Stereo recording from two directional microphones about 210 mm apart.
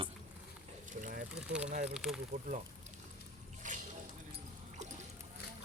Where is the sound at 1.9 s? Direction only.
Centre (ahead or behind).